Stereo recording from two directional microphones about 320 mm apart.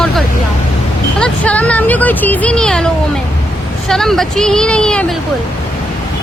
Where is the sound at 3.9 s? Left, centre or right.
Centre.